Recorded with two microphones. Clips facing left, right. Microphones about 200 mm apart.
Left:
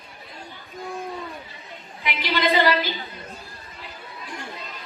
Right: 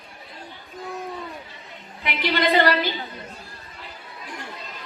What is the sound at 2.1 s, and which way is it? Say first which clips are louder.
Female singing: right 1 dB; 55° right (ahead or behind).